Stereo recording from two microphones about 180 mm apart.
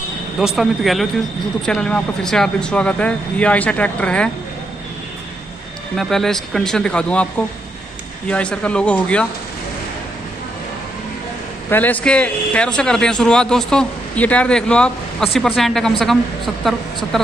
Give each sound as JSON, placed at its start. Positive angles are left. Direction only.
{"t": 0.4, "sound": "a man's voice", "side_deg": 0}
{"t": 5.9, "sound": "a man's voice", "side_deg": 0}
{"t": 8.3, "sound": "speech", "side_deg": 5}
{"t": 11.7, "sound": "a man's voice", "side_deg": 10}
{"t": 17.1, "sound": "a man's voice", "side_deg": 0}